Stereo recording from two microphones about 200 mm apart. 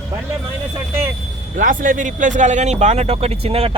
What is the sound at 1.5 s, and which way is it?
Speech, 40° right (ahead or behind).